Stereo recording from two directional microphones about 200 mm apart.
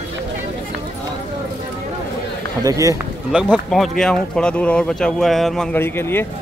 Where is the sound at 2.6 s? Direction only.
15° right (ahead or behind).